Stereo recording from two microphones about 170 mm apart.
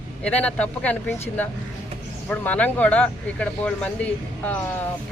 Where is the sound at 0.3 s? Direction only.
5° left (ahead or behind).